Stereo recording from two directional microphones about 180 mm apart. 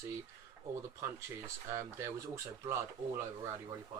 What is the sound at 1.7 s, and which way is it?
Speech, 15° right (ahead or behind).